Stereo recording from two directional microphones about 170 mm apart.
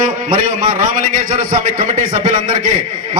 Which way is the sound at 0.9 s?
50° right (ahead or behind).